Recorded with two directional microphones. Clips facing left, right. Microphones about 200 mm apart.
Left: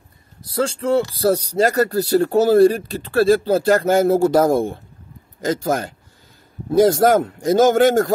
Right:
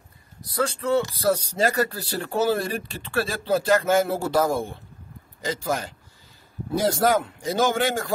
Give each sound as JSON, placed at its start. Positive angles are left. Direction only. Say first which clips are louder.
{"t": 0.5, "sound": "a man's voice", "louder": "left 4 dB", "side_deg": 25}